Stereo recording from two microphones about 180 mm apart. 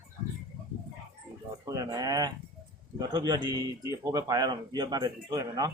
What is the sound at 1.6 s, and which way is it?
Speech, 20° right (ahead or behind).